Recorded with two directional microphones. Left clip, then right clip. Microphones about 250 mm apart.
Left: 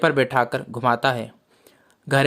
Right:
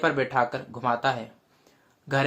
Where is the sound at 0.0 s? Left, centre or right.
Left.